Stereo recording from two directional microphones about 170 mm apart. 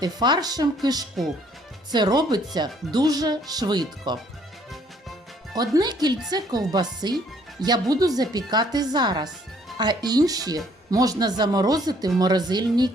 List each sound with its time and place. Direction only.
0.0 s speech: 25° right (ahead or behind)
5.5 s speech: 25° right (ahead or behind)